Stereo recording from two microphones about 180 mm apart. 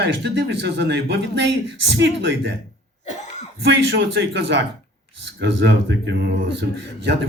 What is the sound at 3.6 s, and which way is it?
A man's voice, 75° right (ahead or behind).